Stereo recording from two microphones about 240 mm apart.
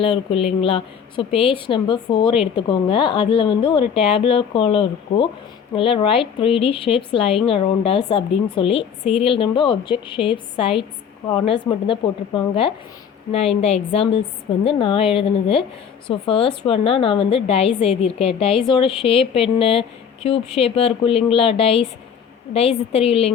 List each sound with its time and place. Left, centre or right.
0.0 s speech: left